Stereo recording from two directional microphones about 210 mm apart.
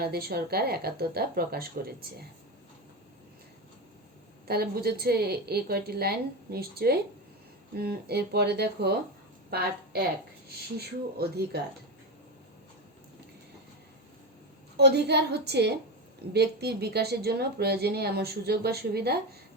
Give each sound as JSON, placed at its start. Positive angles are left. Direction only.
{"t": 0.0, "sound": "a woman's voice", "side_deg": -45}
{"t": 4.4, "sound": "a woman's voice", "side_deg": -45}
{"t": 14.8, "sound": "a woman's voice", "side_deg": -50}